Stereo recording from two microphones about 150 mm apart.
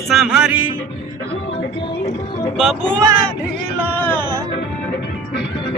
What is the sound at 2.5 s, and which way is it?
Speech, 5° left (ahead or behind).